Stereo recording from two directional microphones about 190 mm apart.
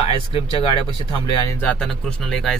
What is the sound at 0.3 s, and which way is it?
Speech, 25° left (ahead or behind).